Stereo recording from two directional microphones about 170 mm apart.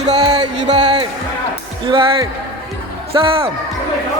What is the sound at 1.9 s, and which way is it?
Speech, 30° right (ahead or behind).